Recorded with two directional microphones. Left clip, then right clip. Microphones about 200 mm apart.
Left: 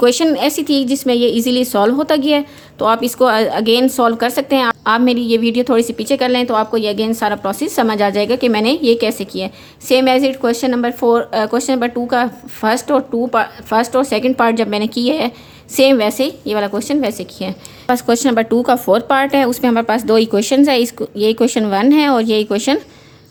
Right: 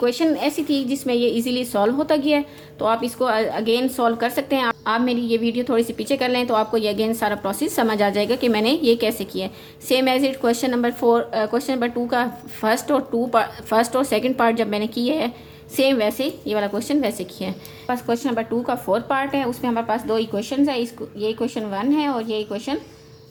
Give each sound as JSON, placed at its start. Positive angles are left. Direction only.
{"t": 0.0, "sound": "a woman's voice", "side_deg": 40}
{"t": 17.8, "sound": "a woman's voice", "side_deg": 45}